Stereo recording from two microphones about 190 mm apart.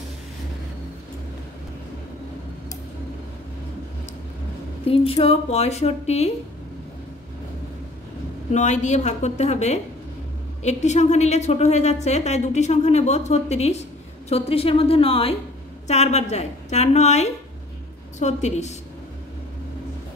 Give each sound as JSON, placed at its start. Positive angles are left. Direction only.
{"t": 4.8, "sound": "a woman's voice", "side_deg": 30}
{"t": 8.5, "sound": "a woman's voice", "side_deg": 40}